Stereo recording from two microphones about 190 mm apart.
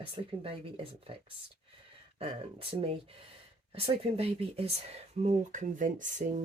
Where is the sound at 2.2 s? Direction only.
30° right (ahead or behind).